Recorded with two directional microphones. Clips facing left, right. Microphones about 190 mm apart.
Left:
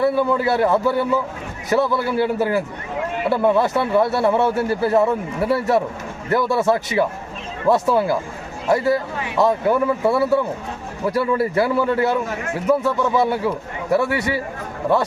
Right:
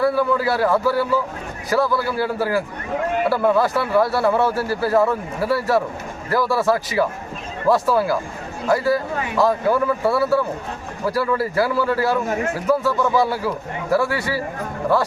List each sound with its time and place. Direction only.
0.0 s a man's voice: 25° left (ahead or behind)